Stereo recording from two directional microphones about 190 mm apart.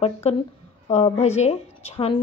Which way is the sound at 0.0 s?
30° left (ahead or behind).